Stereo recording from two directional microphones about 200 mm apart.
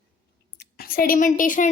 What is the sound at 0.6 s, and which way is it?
A woman's voice, 45° left (ahead or behind).